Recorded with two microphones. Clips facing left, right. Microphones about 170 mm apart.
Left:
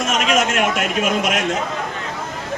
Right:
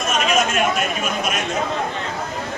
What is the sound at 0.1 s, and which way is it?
A man's voice, 90° left.